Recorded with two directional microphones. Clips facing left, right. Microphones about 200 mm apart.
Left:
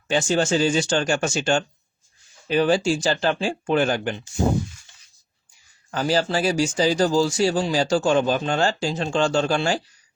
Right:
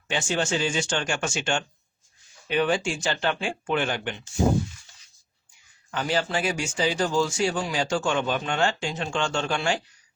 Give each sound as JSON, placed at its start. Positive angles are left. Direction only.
{"t": 0.1, "sound": "speech", "side_deg": 40}
{"t": 5.9, "sound": "speech", "side_deg": 35}